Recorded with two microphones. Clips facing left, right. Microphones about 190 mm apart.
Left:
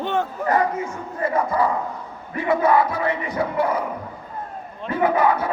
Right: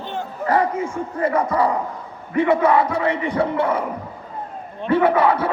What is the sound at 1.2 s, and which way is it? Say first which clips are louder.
Speech: right 2 dB; 30° right (ahead or behind).